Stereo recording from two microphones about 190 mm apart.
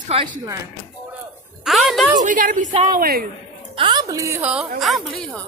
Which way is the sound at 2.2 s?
45° right (ahead or behind).